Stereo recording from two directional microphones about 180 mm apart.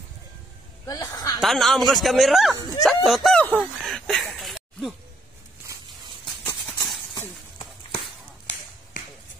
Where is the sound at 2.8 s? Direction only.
Centre (ahead or behind).